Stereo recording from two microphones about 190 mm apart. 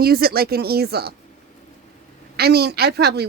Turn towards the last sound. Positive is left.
turn(degrees=-60)  # may be behind; listen again after turning